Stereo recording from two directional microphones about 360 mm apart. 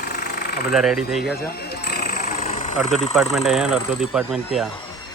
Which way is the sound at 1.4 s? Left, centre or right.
Left.